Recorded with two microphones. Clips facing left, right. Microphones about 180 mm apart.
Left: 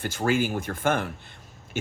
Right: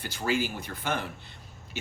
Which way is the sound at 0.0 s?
50° left (ahead or behind).